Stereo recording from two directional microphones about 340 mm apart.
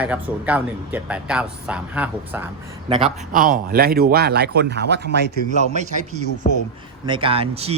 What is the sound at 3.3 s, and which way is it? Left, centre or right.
Speech, right.